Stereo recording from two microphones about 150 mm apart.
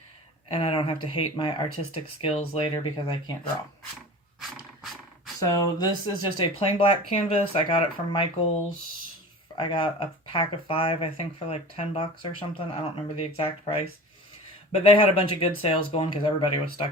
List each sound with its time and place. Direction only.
0.5 s speech: 40° left (ahead or behind)
4.4 s dog: centre (ahead or behind)
5.4 s speech: 25° left (ahead or behind)
9.6 s speech: 35° left (ahead or behind)